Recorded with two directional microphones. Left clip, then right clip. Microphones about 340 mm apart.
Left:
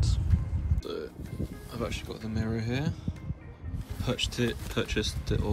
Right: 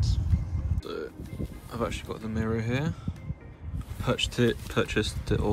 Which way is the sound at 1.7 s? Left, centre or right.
Centre.